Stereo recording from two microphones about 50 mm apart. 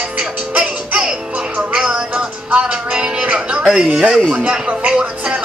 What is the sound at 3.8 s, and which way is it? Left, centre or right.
Speech, centre.